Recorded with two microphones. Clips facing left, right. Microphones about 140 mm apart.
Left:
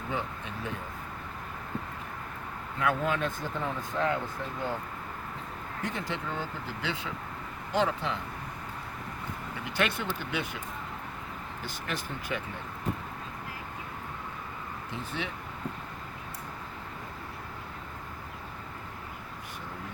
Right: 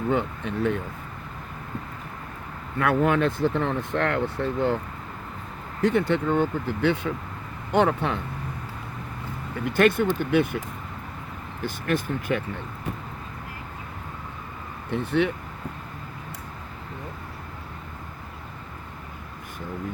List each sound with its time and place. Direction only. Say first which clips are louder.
0.1 s speech: right 8 dB; 60° right (ahead or behind)
2.7 s speech: right 7 dB; 65° right (ahead or behind)
5.8 s speech: right 14 dB; 65° right (ahead or behind)
9.6 s speech: right 11 dB; 50° right (ahead or behind)
11.6 s speech: right 11 dB; 55° right (ahead or behind)
14.8 s speech: right 14 dB; 65° right (ahead or behind)